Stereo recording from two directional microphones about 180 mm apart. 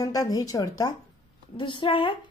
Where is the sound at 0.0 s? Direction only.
20° left (ahead or behind).